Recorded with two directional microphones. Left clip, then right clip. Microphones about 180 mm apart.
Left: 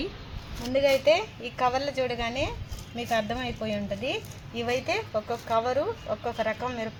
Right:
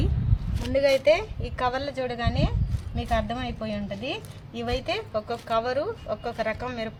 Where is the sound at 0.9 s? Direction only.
25° right (ahead or behind).